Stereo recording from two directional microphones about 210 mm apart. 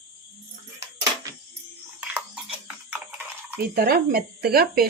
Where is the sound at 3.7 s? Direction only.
45° right (ahead or behind).